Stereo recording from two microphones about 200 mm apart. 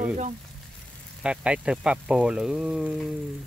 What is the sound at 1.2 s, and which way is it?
Speech, 5° right (ahead or behind).